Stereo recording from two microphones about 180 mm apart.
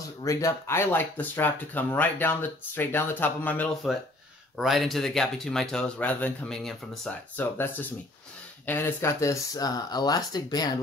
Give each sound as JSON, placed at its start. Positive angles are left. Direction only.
{"t": 0.2, "sound": "speech", "side_deg": 15}
{"t": 8.6, "sound": "speech", "side_deg": 10}